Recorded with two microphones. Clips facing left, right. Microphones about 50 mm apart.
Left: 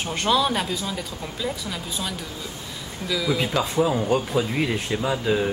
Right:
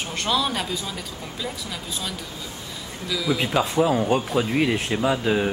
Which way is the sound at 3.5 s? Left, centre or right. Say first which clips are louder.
Right 4 dB; centre.